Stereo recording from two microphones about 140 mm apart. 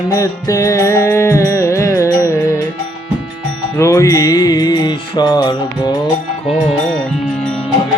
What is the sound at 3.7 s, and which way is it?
Music, 20° left (ahead or behind).